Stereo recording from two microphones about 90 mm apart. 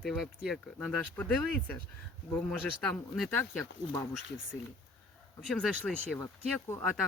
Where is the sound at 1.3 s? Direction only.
10° left (ahead or behind).